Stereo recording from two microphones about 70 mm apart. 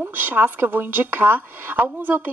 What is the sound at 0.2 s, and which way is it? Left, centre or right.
Speech, right.